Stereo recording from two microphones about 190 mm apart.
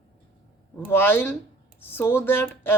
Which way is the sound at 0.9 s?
10° left (ahead or behind).